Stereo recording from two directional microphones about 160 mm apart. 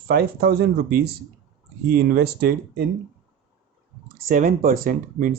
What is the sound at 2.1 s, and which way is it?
Speech, 80° right.